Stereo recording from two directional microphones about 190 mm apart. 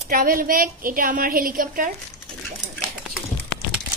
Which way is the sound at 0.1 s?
50° right (ahead or behind).